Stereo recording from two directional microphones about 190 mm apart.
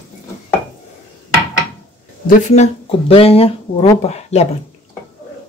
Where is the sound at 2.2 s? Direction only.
40° left (ahead or behind).